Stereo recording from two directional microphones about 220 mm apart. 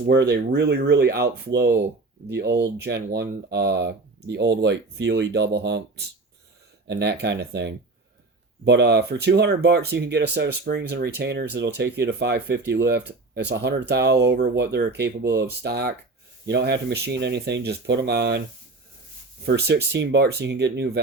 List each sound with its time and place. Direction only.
0.0 s speech: 50° right (ahead or behind)
19.5 s speech: 50° right (ahead or behind)